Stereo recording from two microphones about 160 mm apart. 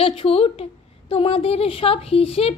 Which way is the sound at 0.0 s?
35° left (ahead or behind).